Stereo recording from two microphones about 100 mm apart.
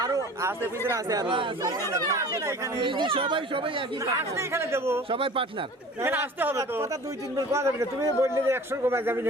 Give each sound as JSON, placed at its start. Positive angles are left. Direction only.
{"t": 0.0, "sound": "chatter", "side_deg": -30}
{"t": 0.9, "sound": "speech", "side_deg": -40}
{"t": 2.8, "sound": "speech", "side_deg": -55}
{"t": 4.0, "sound": "a man's voice", "side_deg": -30}
{"t": 5.1, "sound": "speech", "side_deg": -65}
{"t": 6.0, "sound": "a man's voice", "side_deg": -20}